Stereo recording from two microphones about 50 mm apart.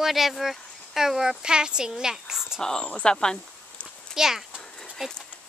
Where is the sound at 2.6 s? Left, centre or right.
Centre.